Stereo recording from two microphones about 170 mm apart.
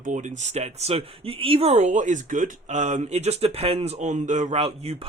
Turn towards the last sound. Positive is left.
turn(degrees=-35)  # may be behind; listen again after turning